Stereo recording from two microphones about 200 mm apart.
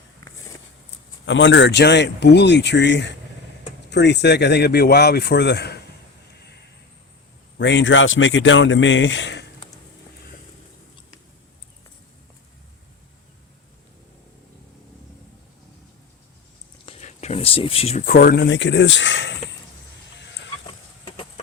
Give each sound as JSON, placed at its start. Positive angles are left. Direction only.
{"t": 1.2, "sound": "speech", "side_deg": 65}
{"t": 7.6, "sound": "a man's voice", "side_deg": 65}
{"t": 16.8, "sound": "speech", "side_deg": 30}
{"t": 21.0, "sound": "a sound", "side_deg": 25}